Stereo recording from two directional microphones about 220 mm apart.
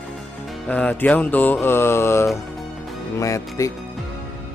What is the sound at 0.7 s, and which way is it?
Speech, 5° left (ahead or behind).